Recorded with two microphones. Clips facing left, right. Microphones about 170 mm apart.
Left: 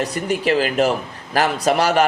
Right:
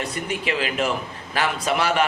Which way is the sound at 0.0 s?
40° left (ahead or behind).